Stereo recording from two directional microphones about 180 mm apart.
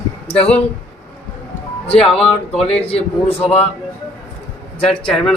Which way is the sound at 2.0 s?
5° left (ahead or behind).